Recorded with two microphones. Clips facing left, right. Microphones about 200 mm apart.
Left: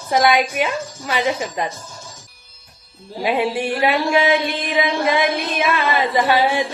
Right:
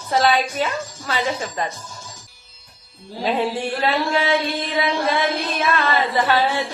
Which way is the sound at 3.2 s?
15° left (ahead or behind).